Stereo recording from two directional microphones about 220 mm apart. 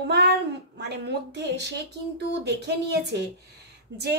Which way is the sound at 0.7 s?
50° right (ahead or behind).